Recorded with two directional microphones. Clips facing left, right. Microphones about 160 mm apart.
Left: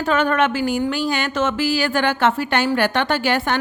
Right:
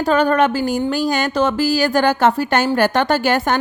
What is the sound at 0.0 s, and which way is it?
A woman's voice, 35° right (ahead or behind).